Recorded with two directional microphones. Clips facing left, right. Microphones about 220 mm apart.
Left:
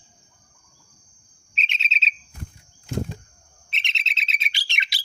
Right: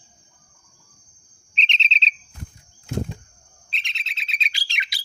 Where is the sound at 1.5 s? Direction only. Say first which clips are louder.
Right 2 dB; 5° left (ahead or behind).